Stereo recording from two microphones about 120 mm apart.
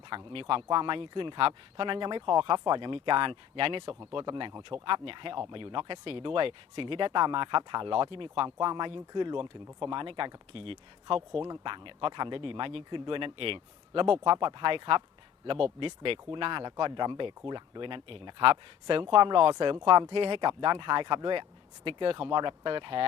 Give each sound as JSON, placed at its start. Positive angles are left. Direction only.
{"t": 0.2, "sound": "speech", "side_deg": -45}